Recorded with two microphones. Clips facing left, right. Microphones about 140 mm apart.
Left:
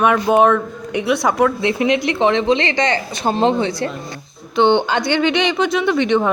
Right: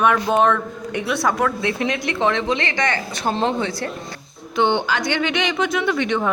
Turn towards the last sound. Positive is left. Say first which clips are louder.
# left 5 dB
turn(degrees=25)  # may be behind; listen again after turning